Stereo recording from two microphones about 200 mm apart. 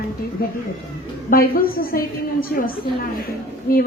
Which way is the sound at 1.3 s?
45° left (ahead or behind).